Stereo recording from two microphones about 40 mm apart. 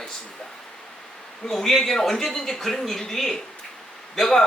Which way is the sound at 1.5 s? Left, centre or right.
Centre.